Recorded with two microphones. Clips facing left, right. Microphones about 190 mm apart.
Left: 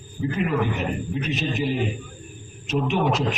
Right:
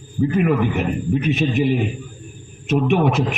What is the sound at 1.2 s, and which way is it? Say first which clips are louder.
Speech: right 6 dB; 55° right (ahead or behind).